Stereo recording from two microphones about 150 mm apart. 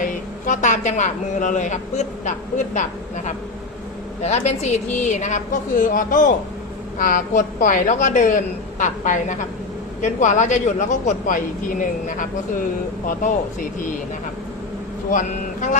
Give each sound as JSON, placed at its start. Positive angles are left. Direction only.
{"t": 0.0, "sound": "a woman's voice", "side_deg": 60}
{"t": 4.2, "sound": "a woman's voice", "side_deg": 45}
{"t": 15.1, "sound": "a woman's voice", "side_deg": 55}